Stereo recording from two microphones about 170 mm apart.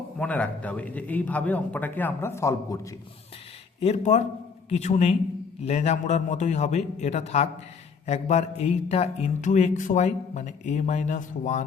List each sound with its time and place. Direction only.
0.2 s a man's voice: 10° left (ahead or behind)
3.8 s a man's voice: 40° left (ahead or behind)
5.6 s a sound: 40° left (ahead or behind)